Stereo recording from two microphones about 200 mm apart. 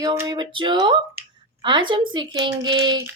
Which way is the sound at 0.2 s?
20° right (ahead or behind).